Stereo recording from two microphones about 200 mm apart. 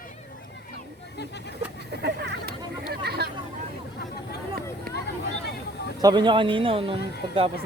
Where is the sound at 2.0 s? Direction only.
55° right (ahead or behind).